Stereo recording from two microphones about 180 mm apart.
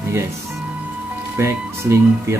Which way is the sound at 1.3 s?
15° right (ahead or behind).